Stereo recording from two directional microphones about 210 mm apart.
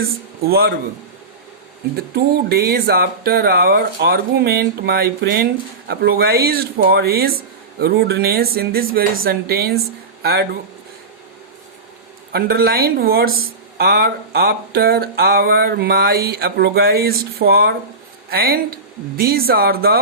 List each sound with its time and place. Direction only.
0.4 s speech: 45° right (ahead or behind)
2.1 s speech: 45° right (ahead or behind)
12.3 s speech: 45° right (ahead or behind)